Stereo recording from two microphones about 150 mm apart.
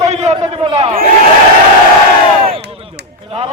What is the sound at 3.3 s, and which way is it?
Speech, 40° right (ahead or behind).